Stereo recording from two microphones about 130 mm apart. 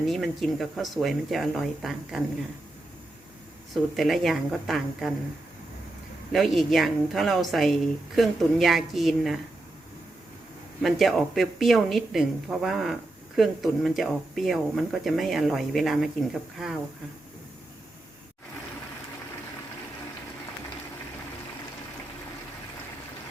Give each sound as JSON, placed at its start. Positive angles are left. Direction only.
{"t": 0.0, "sound": "speech", "side_deg": 0}
{"t": 3.9, "sound": "speech", "side_deg": 0}
{"t": 6.3, "sound": "speech", "side_deg": 0}
{"t": 10.8, "sound": "speech", "side_deg": 0}